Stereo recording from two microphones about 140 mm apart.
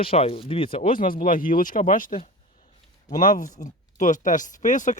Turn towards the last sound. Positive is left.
turn(degrees=65)  # may be behind; listen again after turning